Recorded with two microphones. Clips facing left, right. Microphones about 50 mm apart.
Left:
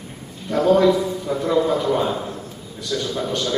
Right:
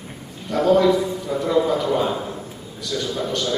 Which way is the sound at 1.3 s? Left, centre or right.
Centre.